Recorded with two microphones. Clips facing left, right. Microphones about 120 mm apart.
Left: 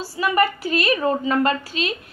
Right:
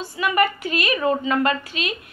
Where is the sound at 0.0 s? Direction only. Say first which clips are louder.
Left 1 dB; 35° left (ahead or behind).